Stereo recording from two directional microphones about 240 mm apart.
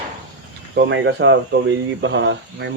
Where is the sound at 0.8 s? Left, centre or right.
Right.